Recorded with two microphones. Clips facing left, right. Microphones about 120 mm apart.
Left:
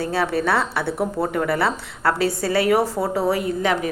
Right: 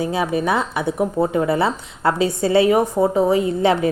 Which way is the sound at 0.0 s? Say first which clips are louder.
Right 1 dB; 15° right (ahead or behind).